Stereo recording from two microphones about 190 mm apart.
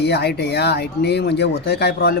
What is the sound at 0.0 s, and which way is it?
Speech, 60° left (ahead or behind).